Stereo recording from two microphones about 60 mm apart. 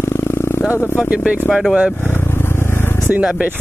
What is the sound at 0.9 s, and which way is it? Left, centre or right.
Speech, centre.